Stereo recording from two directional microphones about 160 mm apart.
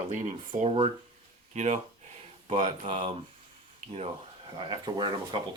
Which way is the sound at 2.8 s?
35° right (ahead or behind).